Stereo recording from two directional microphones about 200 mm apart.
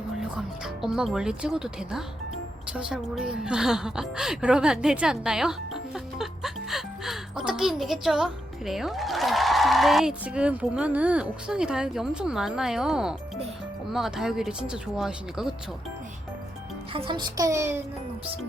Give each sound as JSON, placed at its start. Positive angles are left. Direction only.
{"t": 0.2, "sound": "a woman's voice", "side_deg": -5}
{"t": 16.9, "sound": "a child's voice", "side_deg": -25}